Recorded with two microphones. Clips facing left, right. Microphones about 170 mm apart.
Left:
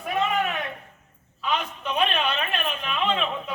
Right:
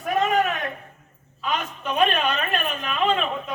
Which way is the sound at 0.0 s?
45° right (ahead or behind).